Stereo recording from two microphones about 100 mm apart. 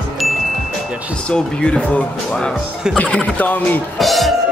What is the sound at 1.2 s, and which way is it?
Speech, 10° left (ahead or behind).